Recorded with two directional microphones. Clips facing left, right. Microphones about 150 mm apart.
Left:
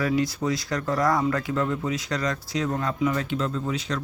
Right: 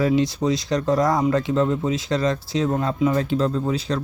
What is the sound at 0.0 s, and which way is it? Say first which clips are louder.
Speech: right 5 dB; 20° right (ahead or behind).